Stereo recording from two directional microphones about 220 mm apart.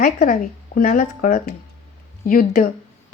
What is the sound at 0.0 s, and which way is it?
Speech, 40° left (ahead or behind).